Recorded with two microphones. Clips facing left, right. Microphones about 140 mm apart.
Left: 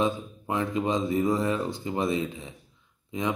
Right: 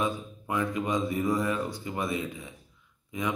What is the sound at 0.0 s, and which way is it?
Speech, 25° left (ahead or behind).